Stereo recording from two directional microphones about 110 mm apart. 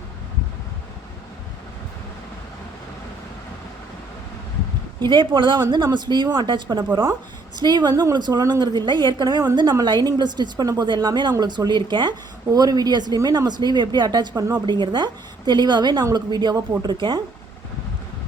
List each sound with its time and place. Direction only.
4.9 s a woman's voice: 45° right (ahead or behind)